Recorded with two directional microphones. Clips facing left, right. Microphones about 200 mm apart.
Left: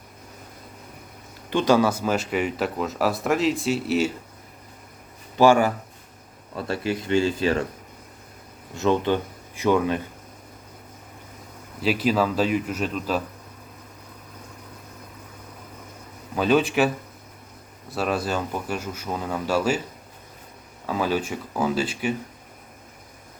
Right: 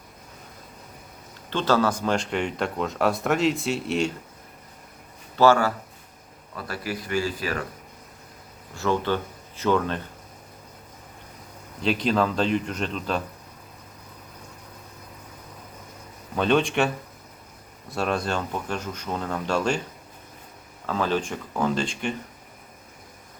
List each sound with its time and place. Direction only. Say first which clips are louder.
1.5 s speech: left 3 dB; 15° left (ahead or behind)
5.4 s speech: left 2 dB; 15° left (ahead or behind)
8.7 s speech: left 3 dB; 20° left (ahead or behind)
11.8 s speech: left 1 dB; 5° left (ahead or behind)
16.3 s speech: left 2 dB; 5° left (ahead or behind)
17.9 s speech: left 1 dB; 5° left (ahead or behind)
20.8 s speech: left 1 dB; 10° left (ahead or behind)